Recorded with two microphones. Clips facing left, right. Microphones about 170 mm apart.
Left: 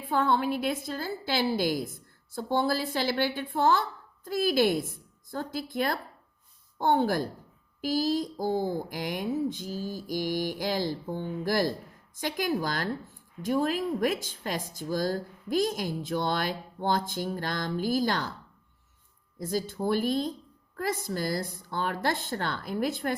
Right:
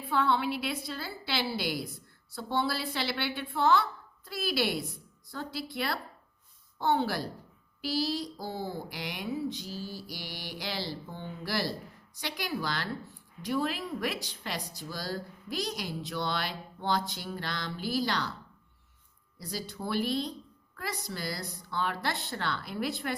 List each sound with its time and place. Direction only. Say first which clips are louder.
0.0 s a woman's voice: left 2 dB; 45° left (ahead or behind)
19.4 s a woman's voice: left 8 dB; 50° left (ahead or behind)